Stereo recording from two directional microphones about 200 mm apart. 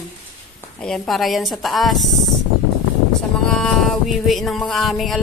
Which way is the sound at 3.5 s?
Centre (ahead or behind).